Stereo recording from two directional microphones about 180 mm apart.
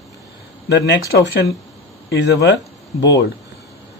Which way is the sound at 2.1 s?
70° left (ahead or behind).